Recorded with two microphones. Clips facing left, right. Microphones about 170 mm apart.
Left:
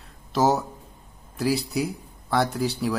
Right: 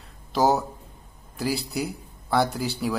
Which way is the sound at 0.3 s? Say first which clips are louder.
Even; centre (ahead or behind).